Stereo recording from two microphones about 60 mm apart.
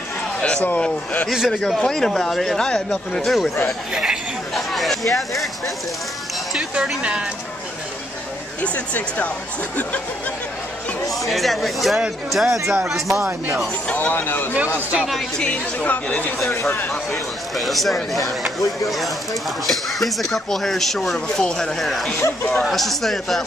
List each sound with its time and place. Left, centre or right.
0.7 s speech: centre
3.2 s speech: centre
3.9 s speech: centre
4.6 s speech: centre
7.0 s speech: centre
8.5 s speech: left
11.1 s speech: centre
13.9 s speech: left
15.8 s speech: left
16.3 s speech: left
16.9 s speech: centre